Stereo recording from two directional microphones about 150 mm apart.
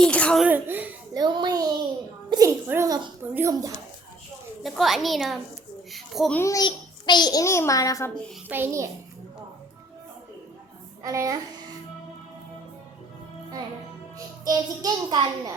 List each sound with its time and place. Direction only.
0.0 s a child's voice: 5° left (ahead or behind)
0.4 s a child's voice: 10° right (ahead or behind)
1.1 s a child's voice: 30° right (ahead or behind)
4.6 s a child's voice: centre (ahead or behind)
6.3 s a child's voice: 20° left (ahead or behind)
6.7 s a child's voice: 30° left (ahead or behind)
8.4 s a child's voice: 15° right (ahead or behind)
11.0 s a child's voice: 20° right (ahead or behind)
14.4 s a child's voice: 25° right (ahead or behind)